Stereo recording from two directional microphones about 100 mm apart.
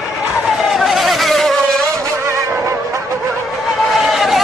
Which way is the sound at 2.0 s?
30° right (ahead or behind).